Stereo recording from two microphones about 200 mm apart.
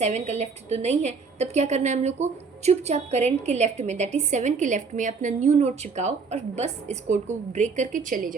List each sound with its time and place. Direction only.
0.0 s a woman's voice: 35° right (ahead or behind)